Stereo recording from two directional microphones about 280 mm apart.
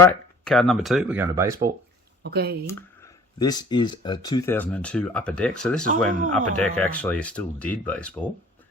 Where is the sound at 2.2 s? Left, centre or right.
Right.